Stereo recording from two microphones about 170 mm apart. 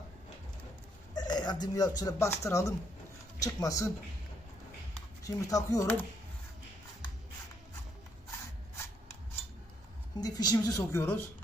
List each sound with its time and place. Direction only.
1.1 s a woman's voice: 25° left (ahead or behind)
5.2 s a woman's voice: 20° left (ahead or behind)
10.2 s a woman's voice: 25° left (ahead or behind)